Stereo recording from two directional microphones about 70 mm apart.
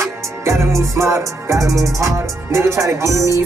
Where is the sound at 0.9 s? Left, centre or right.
Right.